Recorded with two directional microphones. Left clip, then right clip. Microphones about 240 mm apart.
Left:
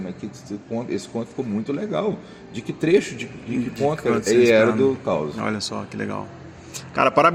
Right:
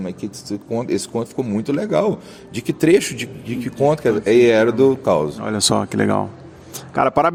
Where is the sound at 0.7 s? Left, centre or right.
Right.